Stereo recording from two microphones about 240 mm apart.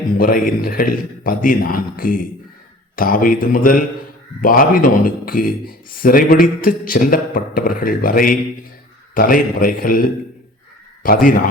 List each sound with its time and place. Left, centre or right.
0.2 s a man's voice: left
11.0 s a man's voice: left